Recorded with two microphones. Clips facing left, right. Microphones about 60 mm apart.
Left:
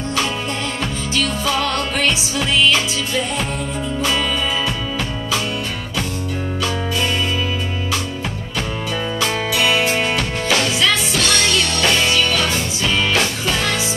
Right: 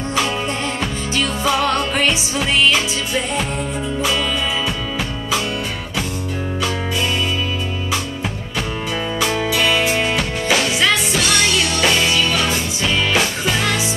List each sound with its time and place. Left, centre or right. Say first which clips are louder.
1.1 s music: right 1 dB; right
1.5 s music: right 5 dB; centre
9.2 s music: right 2 dB; centre
10.1 s drum: right 1 dB; centre
11.1 s music: even; centre